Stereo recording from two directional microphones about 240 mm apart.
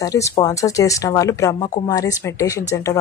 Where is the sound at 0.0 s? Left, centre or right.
Centre.